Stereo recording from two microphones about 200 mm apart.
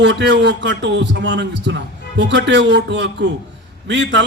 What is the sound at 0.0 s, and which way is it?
A man's voice, 60° right (ahead or behind).